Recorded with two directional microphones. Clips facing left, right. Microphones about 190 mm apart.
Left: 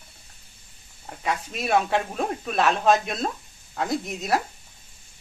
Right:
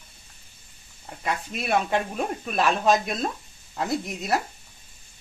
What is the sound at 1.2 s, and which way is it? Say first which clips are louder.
Speech: left 1 dB; centre (ahead or behind).